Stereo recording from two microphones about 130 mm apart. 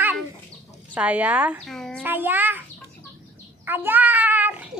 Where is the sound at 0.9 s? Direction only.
10° right (ahead or behind).